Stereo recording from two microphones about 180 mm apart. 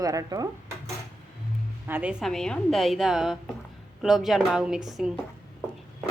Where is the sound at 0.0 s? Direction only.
20° right (ahead or behind).